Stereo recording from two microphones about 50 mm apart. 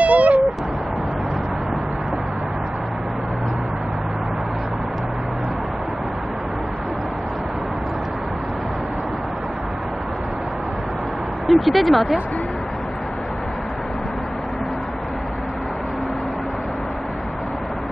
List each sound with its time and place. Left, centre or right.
0.0 s cat: right
11.4 s speech: centre